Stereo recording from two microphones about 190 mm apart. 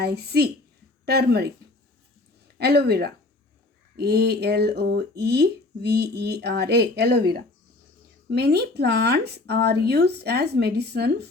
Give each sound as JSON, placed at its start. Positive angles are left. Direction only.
{"t": 0.0, "sound": "speech", "side_deg": -60}
{"t": 2.6, "sound": "speech", "side_deg": -60}